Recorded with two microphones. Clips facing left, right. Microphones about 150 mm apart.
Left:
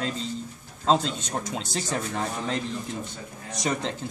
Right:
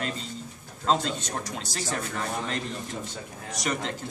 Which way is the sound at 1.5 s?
20° left (ahead or behind).